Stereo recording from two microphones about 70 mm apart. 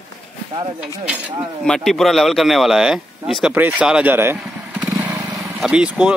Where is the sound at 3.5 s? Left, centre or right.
Right.